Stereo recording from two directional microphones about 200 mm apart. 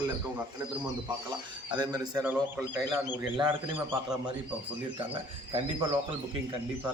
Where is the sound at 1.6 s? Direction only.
20° right (ahead or behind).